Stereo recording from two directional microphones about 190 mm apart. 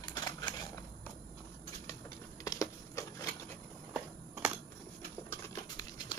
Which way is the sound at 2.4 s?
20° left (ahead or behind).